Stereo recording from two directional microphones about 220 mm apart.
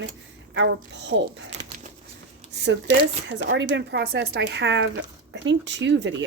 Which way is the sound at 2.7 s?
55° right (ahead or behind).